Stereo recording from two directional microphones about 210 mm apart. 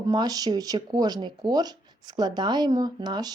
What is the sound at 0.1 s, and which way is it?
A woman's voice, 20° right (ahead or behind).